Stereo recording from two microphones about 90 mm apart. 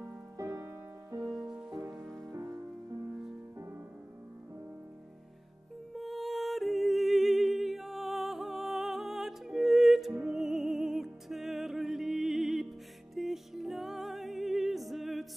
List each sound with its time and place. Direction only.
0.4 s music: 35° right (ahead or behind)
1.2 s music: 5° right (ahead or behind)
2.0 s music: 5° left (ahead or behind)
5.9 s music: centre (ahead or behind)